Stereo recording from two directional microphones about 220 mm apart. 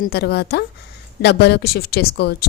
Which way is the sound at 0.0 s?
45° left (ahead or behind).